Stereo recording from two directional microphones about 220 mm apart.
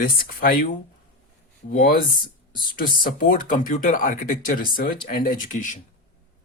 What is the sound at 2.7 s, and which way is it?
Speech, 40° left (ahead or behind).